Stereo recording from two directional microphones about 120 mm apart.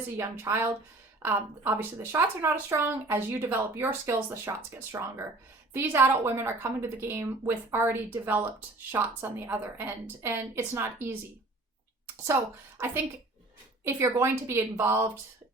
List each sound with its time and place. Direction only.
0.2 s speech: 20° right (ahead or behind)
12.0 s a sound: 20° right (ahead or behind)
13.8 s speech: 20° right (ahead or behind)